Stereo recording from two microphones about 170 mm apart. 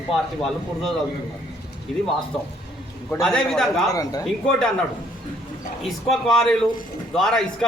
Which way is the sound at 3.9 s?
20° left (ahead or behind).